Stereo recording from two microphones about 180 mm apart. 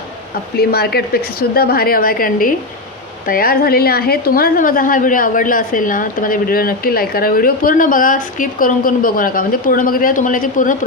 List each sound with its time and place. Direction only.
0.5 s a woman's voice: 60° left (ahead or behind)